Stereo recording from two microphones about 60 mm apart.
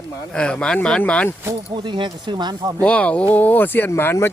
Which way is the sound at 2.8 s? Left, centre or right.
Left.